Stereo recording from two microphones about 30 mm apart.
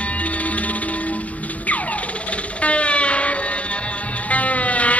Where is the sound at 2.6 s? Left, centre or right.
Left.